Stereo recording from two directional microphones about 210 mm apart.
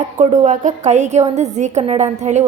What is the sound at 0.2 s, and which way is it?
A woman's voice, 35° right (ahead or behind).